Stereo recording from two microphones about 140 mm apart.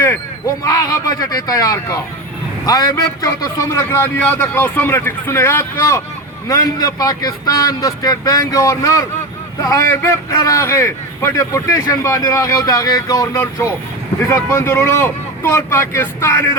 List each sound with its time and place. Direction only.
0.6 s a man's voice: 20° left (ahead or behind)